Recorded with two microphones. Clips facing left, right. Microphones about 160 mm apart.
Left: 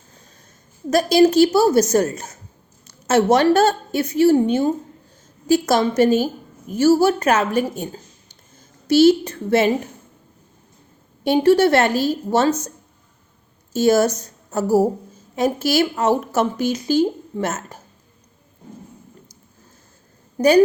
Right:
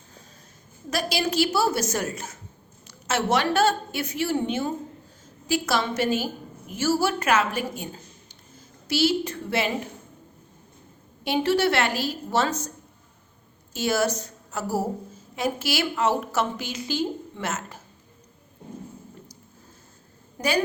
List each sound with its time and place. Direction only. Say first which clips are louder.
0.9 s a woman's voice: left 12 dB; 45° left (ahead or behind)
11.2 s a woman's voice: left 8 dB; 45° left (ahead or behind)
13.7 s a woman's voice: left 8 dB; 40° left (ahead or behind)
20.4 s a woman's voice: left 12 dB; 35° left (ahead or behind)